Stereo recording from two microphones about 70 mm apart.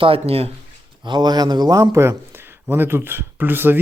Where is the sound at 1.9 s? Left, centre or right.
Right.